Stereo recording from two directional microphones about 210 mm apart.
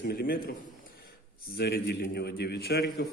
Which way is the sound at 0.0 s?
45° left (ahead or behind).